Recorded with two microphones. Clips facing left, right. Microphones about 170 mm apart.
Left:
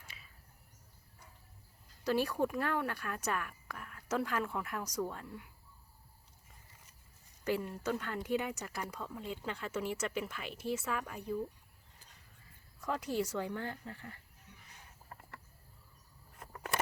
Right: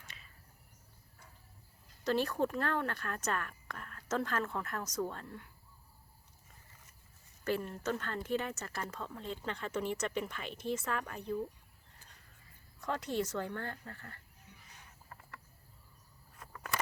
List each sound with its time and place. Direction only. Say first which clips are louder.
0.0 s a sound: even; 5° left (ahead or behind)
2.0 s speech: even; 10° left (ahead or behind)
7.4 s speech: even; 10° left (ahead or behind)
12.8 s speech: even; 10° left (ahead or behind)
15.1 s cricket: left 2 dB; 30° left (ahead or behind)
16.5 s a sound: left 2 dB; 25° left (ahead or behind)